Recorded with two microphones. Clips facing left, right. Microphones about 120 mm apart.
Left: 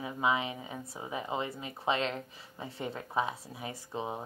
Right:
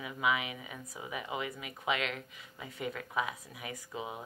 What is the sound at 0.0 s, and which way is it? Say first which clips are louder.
A woman's voice: left 2 dB; 30° left (ahead or behind).